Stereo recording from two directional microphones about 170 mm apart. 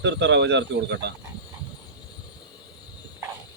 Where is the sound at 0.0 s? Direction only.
90° right.